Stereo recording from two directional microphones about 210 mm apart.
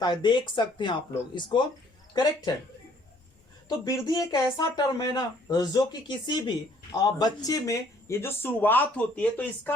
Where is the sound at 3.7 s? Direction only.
20° left (ahead or behind).